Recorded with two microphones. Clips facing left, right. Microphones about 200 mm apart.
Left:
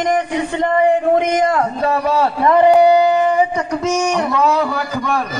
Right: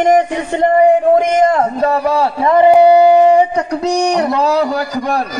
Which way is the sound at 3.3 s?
35° right (ahead or behind).